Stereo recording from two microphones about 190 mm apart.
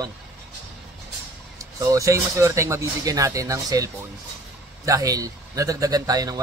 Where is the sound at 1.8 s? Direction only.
15° right (ahead or behind).